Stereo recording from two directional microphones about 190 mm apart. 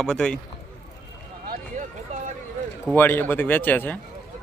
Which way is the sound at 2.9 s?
10° left (ahead or behind).